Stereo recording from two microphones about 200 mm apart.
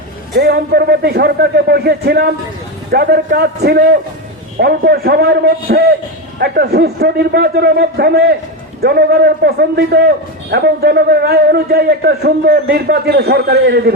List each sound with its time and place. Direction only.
0.3 s a man's voice: 55° right (ahead or behind)